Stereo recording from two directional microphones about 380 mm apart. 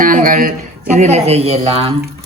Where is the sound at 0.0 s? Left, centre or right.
Right.